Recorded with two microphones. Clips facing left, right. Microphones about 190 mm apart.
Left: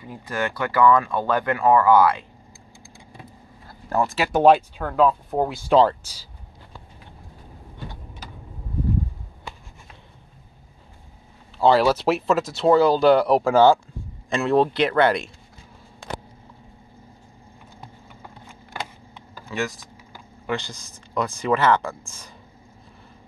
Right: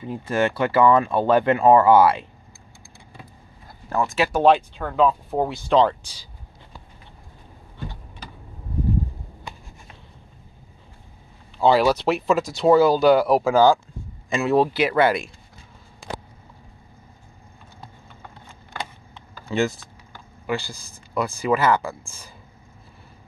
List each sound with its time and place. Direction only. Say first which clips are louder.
0.0 s speech: right 5 dB; 20° right (ahead or behind)
3.9 s speech: left 1 dB; 35° left (ahead or behind)
4.3 s speech: left 3 dB; 10° left (ahead or behind)
11.5 s speech: even; centre (ahead or behind)
19.5 s typing: right 5 dB; 30° right (ahead or behind)
20.4 s speech: right 1 dB; 10° right (ahead or behind)